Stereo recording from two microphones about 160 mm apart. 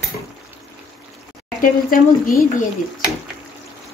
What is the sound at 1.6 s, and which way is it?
Speech, 60° left (ahead or behind).